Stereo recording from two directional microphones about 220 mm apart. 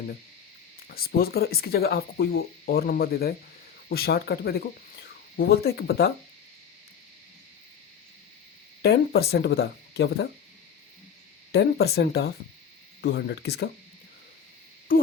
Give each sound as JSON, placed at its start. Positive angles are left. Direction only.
{"t": 0.8, "sound": "speech", "side_deg": 45}
{"t": 8.8, "sound": "speech", "side_deg": 45}
{"t": 11.5, "sound": "speech", "side_deg": 45}
{"t": 14.9, "sound": "hoot", "side_deg": 40}